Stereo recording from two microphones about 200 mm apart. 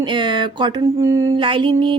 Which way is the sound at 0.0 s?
25° right (ahead or behind).